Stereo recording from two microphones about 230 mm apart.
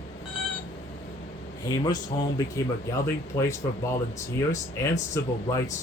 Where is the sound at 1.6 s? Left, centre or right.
Centre.